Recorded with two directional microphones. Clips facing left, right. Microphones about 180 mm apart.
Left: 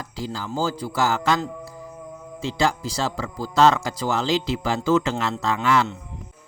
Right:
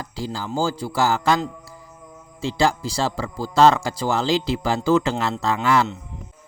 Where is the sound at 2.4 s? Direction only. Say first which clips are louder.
Right 2 dB; 30° right (ahead or behind).